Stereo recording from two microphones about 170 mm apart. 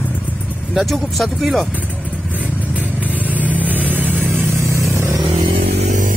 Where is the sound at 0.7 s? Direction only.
Centre (ahead or behind).